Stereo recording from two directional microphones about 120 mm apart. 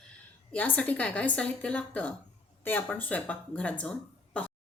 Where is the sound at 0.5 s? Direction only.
10° left (ahead or behind).